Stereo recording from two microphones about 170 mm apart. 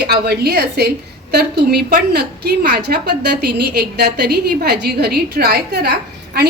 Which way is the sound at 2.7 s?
75° right (ahead or behind).